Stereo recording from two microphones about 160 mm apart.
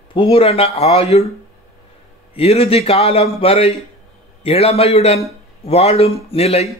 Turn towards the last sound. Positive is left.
turn(degrees=40)  # may be behind; listen again after turning